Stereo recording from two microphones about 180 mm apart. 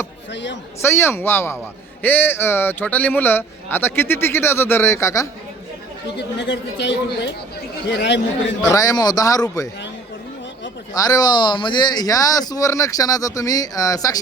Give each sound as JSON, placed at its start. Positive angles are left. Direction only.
{"t": 0.8, "sound": "speech", "side_deg": 15}
{"t": 6.1, "sound": "speech", "side_deg": 70}
{"t": 8.6, "sound": "speech", "side_deg": 20}
{"t": 10.9, "sound": "speech", "side_deg": 20}